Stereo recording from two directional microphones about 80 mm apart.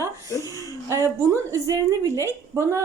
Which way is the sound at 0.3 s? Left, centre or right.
Left.